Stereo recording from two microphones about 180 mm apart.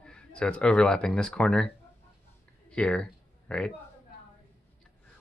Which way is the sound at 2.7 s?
5° left (ahead or behind).